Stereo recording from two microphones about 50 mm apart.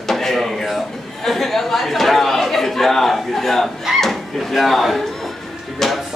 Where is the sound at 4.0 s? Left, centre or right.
Centre.